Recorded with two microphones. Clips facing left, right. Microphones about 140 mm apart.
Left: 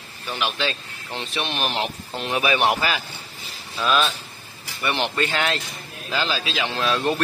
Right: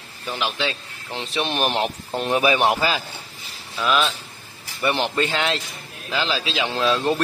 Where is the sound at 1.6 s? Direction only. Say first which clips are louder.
Right 3 dB; 45° right (ahead or behind).